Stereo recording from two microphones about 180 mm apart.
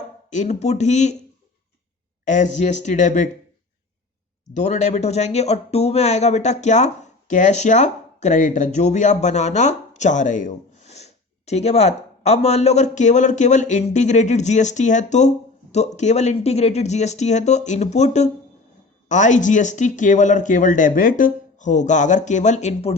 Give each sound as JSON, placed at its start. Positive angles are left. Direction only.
{"t": 0.3, "sound": "speech", "side_deg": 40}
{"t": 2.2, "sound": "speech", "side_deg": 45}
{"t": 4.5, "sound": "speech", "side_deg": 40}